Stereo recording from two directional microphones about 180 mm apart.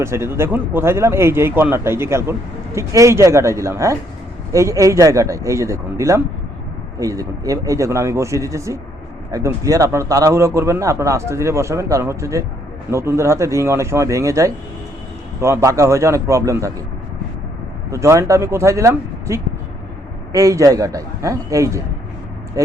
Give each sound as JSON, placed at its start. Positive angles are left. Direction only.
{"t": 0.0, "sound": "a man's voice", "side_deg": -15}
{"t": 17.9, "sound": "a man's voice", "side_deg": -15}